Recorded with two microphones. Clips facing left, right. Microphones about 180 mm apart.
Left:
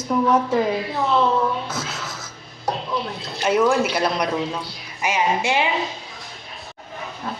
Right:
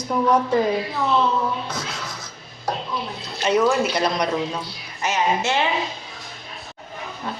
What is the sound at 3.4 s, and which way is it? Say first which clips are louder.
A woman's voice: left 1 dB; 5° left (ahead or behind).